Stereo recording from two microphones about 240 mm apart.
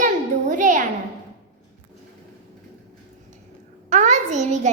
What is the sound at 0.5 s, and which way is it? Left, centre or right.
Music, right.